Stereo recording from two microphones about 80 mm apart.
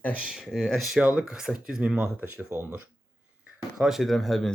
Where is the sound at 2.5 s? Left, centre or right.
Right.